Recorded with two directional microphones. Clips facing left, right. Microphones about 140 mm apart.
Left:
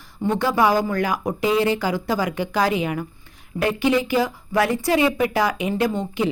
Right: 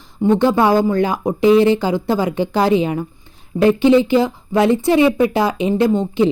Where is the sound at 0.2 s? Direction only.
20° right (ahead or behind).